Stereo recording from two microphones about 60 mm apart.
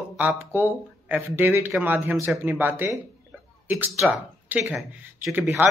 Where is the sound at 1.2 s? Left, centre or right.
Right.